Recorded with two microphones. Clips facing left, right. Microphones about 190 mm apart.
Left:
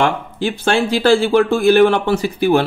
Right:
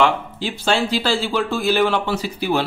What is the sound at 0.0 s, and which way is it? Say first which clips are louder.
Speech: left 2 dB; 55° left (ahead or behind).